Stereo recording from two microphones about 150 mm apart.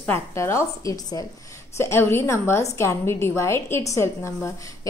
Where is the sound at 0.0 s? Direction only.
15° left (ahead or behind).